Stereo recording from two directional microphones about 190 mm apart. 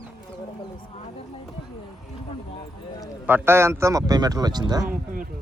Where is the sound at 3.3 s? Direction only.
15° right (ahead or behind).